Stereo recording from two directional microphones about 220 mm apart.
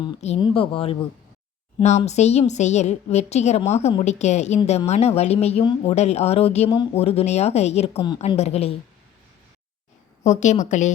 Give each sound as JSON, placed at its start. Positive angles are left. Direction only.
{"t": 0.0, "sound": "a woman's voice", "side_deg": 25}
{"t": 10.2, "sound": "a woman's voice", "side_deg": 35}